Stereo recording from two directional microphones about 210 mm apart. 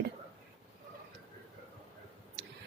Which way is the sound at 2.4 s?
50° right (ahead or behind).